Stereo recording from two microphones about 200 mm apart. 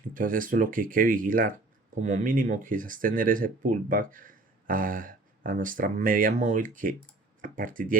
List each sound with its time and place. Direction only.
0.1 s speech: 45° right (ahead or behind)